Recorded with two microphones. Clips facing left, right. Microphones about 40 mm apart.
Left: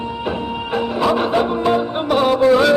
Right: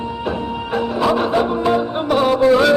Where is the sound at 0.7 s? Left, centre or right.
Left.